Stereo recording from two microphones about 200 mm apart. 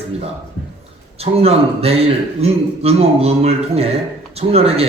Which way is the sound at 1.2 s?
30° right (ahead or behind).